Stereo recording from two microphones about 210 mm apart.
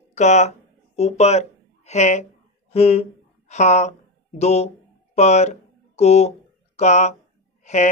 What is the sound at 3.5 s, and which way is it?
Speech, 35° left (ahead or behind).